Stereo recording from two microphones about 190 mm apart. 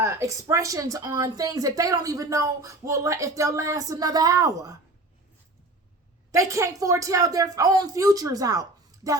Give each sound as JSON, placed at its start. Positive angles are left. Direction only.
{"t": 0.0, "sound": "a woman's voice", "side_deg": -15}
{"t": 6.3, "sound": "a woman's voice", "side_deg": -15}